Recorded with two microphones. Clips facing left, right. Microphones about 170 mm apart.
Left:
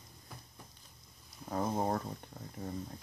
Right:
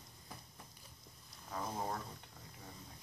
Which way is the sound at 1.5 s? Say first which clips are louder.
Left 8 dB; 45° left (ahead or behind).